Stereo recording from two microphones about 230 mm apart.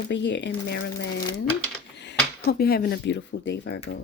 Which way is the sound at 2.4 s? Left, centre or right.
Left.